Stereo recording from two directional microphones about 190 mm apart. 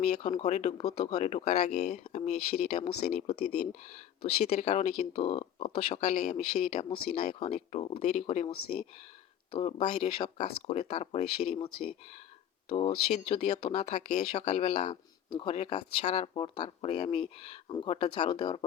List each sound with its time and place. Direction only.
0.0 s speech: 35° left (ahead or behind)
10.3 s speech: 35° left (ahead or behind)